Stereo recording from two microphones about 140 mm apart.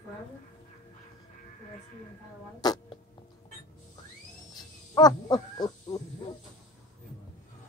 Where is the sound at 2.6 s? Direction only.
30° left (ahead or behind).